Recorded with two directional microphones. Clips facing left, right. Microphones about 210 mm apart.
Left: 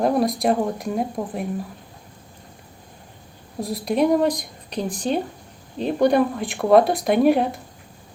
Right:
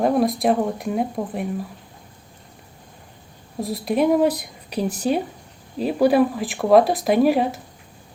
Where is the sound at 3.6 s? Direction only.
Centre (ahead or behind).